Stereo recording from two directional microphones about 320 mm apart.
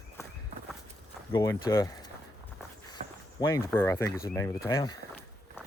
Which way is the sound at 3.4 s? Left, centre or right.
Centre.